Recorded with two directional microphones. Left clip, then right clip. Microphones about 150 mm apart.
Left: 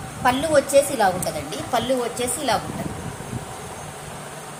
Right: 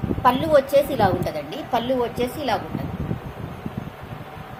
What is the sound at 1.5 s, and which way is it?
A woman's voice, 25° right (ahead or behind).